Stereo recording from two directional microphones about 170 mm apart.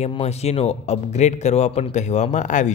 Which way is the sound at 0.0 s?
40° left (ahead or behind).